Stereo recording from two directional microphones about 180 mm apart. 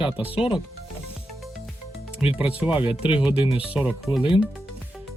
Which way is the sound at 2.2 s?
5° right (ahead or behind).